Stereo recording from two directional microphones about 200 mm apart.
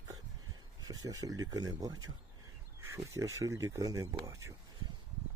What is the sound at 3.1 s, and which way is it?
Speech, 15° right (ahead or behind).